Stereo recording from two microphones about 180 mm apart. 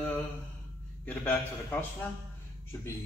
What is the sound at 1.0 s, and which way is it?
Speech, 10° left (ahead or behind).